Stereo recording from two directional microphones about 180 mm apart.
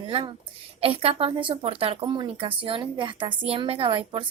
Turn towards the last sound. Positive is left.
turn(degrees=-30)  # may be behind; listen again after turning